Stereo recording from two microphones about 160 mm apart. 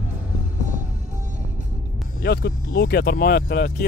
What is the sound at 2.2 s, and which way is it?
Speech, 85° left.